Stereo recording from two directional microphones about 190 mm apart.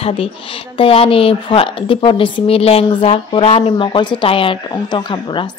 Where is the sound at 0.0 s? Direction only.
30° left (ahead or behind).